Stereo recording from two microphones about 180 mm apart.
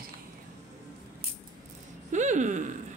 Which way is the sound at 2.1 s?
40° right (ahead or behind).